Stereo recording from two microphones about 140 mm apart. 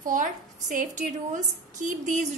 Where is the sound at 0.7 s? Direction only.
65° right (ahead or behind).